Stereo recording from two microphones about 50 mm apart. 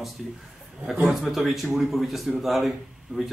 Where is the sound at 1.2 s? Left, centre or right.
Centre.